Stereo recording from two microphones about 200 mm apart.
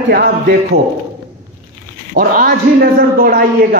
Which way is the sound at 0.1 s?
50° right (ahead or behind).